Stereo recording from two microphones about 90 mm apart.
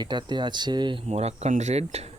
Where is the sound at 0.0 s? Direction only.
55° right (ahead or behind).